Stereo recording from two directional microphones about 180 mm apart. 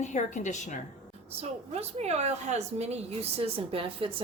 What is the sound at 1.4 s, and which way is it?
A woman's voice, 35° right (ahead or behind).